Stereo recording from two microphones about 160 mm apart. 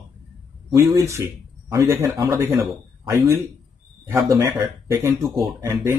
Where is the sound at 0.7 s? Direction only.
20° right (ahead or behind).